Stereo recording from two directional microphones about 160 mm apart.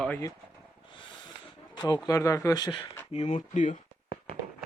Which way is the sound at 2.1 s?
20° left (ahead or behind).